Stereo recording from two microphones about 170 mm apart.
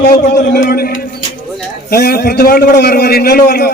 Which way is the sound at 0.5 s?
60° left (ahead or behind).